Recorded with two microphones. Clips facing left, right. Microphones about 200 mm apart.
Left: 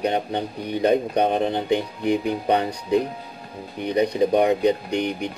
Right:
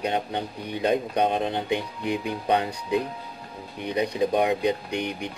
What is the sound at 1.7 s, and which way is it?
Speech, 45° left (ahead or behind).